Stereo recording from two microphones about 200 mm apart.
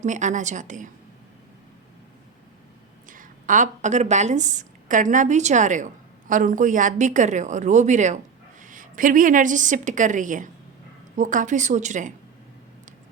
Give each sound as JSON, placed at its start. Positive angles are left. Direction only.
{"t": 0.0, "sound": "a woman's voice", "side_deg": -40}
{"t": 3.1, "sound": "a woman's voice", "side_deg": -40}